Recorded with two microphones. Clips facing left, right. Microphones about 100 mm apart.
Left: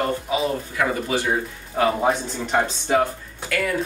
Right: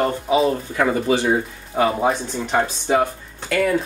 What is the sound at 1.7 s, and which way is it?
A man's voice, centre (ahead or behind).